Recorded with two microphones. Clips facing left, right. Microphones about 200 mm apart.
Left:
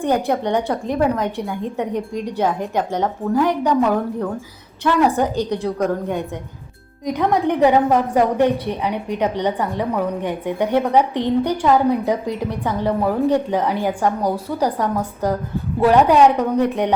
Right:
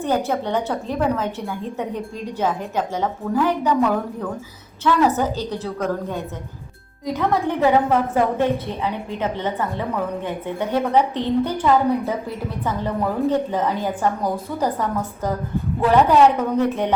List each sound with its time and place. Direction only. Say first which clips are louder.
0.3 s a woman's voice: left 3 dB; 15° left (ahead or behind)
3.0 s a woman's voice: left 2 dB; 15° left (ahead or behind)